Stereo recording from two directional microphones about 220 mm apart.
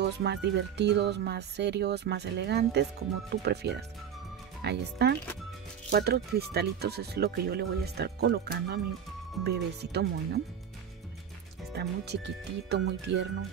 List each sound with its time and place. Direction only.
0.0 s speech: 50° right (ahead or behind)
11.7 s speech: 50° right (ahead or behind)